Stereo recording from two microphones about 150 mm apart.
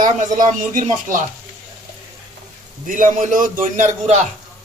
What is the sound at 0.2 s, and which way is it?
Speech, 55° right (ahead or behind).